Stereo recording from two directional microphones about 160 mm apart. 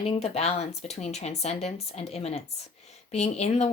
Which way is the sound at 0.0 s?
40° left (ahead or behind).